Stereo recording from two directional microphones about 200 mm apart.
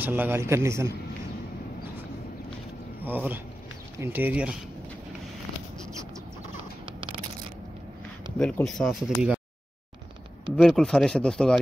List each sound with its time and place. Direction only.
0.0 s a man's voice: 10° right (ahead or behind)
3.0 s a man's voice: 10° right (ahead or behind)
6.9 s a sound: 25° right (ahead or behind)
8.4 s speech: 5° left (ahead or behind)
10.5 s speech: centre (ahead or behind)